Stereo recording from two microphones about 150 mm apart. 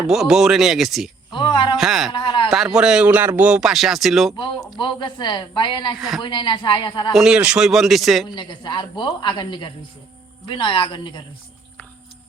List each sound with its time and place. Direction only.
0.1 s speech: 5° right (ahead or behind)
1.3 s a woman's voice: 30° left (ahead or behind)
1.8 s speech: centre (ahead or behind)
2.1 s a sound: 35° left (ahead or behind)
2.7 s speech: 5° right (ahead or behind)
4.8 s a woman's voice: 30° left (ahead or behind)
6.0 s speech: centre (ahead or behind)
6.2 s a woman's voice: 30° left (ahead or behind)
7.1 s speech: 5° right (ahead or behind)
8.4 s a woman's voice: 30° left (ahead or behind)